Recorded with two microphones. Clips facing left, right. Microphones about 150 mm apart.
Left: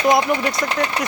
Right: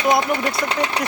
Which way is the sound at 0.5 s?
25° right (ahead or behind).